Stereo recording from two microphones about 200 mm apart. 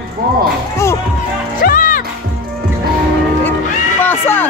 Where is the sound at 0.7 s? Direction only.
15° left (ahead or behind).